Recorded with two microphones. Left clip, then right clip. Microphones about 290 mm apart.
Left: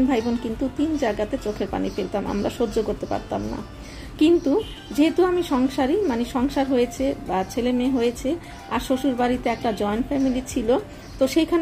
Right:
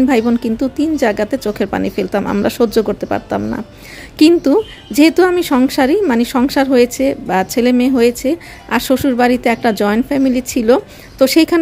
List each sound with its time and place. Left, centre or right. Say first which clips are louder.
0.1 s a woman's voice: right 9 dB; right